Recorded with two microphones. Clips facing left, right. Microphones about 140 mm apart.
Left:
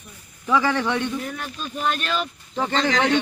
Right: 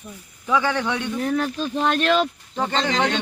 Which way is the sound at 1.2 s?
80° right.